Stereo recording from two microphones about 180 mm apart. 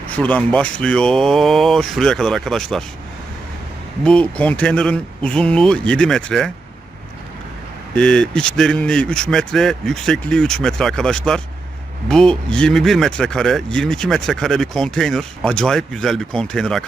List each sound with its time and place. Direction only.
0.1 s speech: 5° left (ahead or behind)
4.0 s speech: 5° left (ahead or behind)
7.9 s speech: 5° left (ahead or behind)